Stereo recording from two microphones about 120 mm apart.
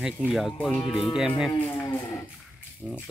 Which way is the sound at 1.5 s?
15° left (ahead or behind).